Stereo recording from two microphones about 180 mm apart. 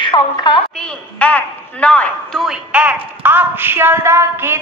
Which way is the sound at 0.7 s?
5° left (ahead or behind).